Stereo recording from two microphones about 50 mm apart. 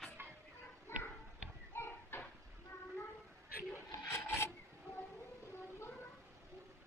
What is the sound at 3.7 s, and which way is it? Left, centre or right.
Filing, left.